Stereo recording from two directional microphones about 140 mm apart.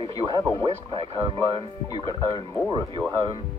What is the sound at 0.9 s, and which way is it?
Speech, 40° right (ahead or behind).